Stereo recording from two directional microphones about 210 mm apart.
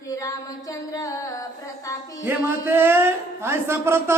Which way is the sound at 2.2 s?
10° right (ahead or behind).